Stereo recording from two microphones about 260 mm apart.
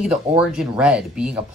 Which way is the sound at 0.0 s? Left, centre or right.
Centre.